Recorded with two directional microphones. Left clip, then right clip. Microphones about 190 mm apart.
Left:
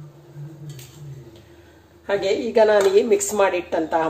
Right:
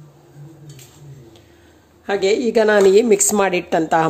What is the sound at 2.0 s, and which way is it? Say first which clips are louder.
A woman's voice: right 4 dB; 55° right (ahead or behind).